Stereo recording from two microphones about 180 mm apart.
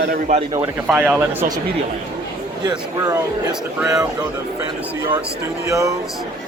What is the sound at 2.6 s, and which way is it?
Speech, 20° right (ahead or behind).